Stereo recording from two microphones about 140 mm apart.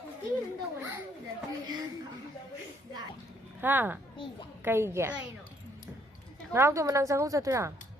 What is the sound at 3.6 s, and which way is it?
A woman's voice, 15° right (ahead or behind).